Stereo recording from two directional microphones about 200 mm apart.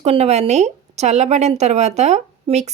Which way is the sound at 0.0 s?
30° right (ahead or behind).